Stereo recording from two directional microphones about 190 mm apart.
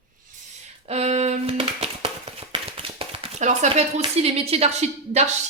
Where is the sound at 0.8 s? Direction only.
35° right (ahead or behind).